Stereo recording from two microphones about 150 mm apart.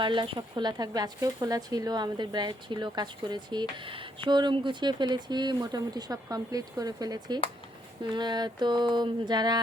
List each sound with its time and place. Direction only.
0.0 s speech: 30° right (ahead or behind)